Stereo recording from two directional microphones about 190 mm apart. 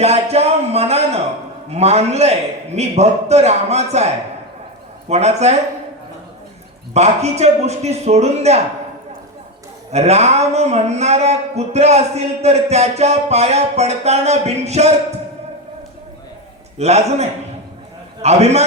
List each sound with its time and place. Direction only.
0.0 s a sound: 35° right (ahead or behind)
1.7 s speech: 35° right (ahead or behind)
6.9 s speech: 35° right (ahead or behind)
9.9 s speech: 35° right (ahead or behind)
16.7 s a man's voice: 35° right (ahead or behind)